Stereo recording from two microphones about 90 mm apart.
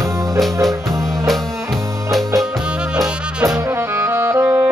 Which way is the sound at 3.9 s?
30° right (ahead or behind).